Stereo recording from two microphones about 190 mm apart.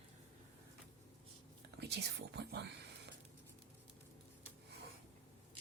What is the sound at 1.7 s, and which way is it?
Speech, 60° right (ahead or behind).